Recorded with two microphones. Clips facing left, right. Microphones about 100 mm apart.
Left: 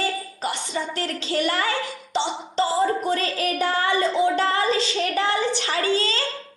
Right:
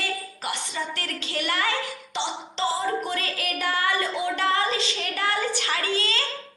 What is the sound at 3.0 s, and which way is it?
Speech, 35° left (ahead or behind).